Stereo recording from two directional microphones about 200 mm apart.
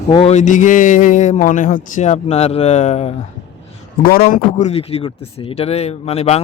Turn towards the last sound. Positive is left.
turn(degrees=30)  # may be behind; listen again after turning